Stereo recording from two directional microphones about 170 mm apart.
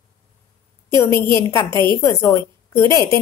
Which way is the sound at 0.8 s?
15° left (ahead or behind).